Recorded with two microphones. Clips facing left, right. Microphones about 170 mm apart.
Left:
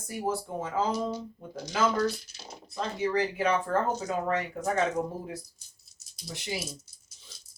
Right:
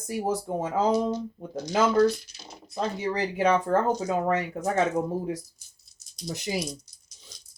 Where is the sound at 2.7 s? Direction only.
35° right (ahead or behind).